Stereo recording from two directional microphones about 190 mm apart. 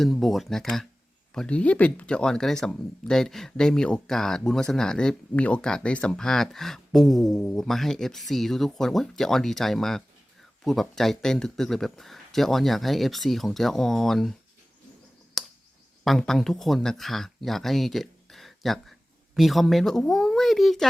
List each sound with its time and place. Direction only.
0.0 s speech: centre (ahead or behind)
15.4 s a sound: centre (ahead or behind)
16.0 s speech: centre (ahead or behind)